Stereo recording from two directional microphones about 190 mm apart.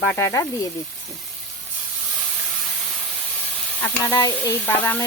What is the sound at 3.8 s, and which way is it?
Speech, 10° left (ahead or behind).